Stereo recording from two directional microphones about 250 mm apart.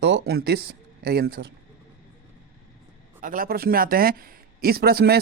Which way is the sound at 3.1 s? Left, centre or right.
Right.